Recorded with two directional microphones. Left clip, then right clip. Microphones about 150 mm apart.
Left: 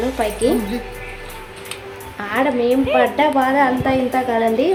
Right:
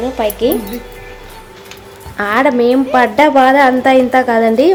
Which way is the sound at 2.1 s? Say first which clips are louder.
Right 7 dB; 55° right (ahead or behind).